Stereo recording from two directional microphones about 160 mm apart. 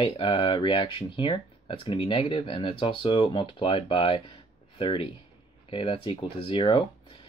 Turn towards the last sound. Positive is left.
turn(degrees=30)  # may be behind; listen again after turning